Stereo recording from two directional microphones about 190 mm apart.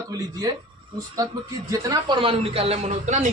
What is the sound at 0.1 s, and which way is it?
Speech, 20° right (ahead or behind).